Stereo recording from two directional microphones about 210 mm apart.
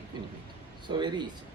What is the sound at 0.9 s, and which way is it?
Speech, 20° right (ahead or behind).